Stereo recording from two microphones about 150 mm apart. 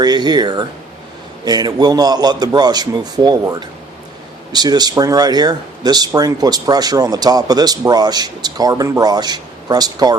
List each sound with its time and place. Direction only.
0.0 s speech: 30° right (ahead or behind)